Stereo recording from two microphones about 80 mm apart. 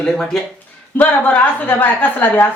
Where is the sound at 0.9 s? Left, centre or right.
Left.